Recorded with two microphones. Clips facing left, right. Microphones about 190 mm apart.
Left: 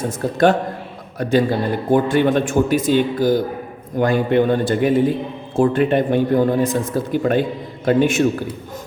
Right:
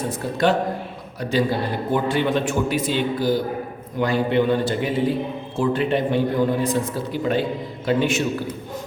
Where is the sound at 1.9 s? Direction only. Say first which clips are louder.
Left 6 dB; 50° left (ahead or behind).